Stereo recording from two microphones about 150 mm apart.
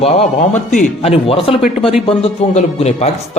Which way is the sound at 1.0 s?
40° left (ahead or behind).